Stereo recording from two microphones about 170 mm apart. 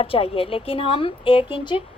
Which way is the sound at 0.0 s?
35° left (ahead or behind).